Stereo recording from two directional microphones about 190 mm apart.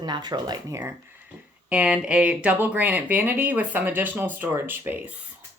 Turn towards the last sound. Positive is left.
turn(degrees=-10)  # may be behind; listen again after turning